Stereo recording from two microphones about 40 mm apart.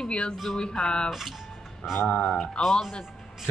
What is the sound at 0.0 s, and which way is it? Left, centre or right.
A woman's voice, left.